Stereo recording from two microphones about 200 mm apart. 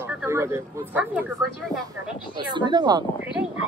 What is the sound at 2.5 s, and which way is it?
Speech, 20° right (ahead or behind).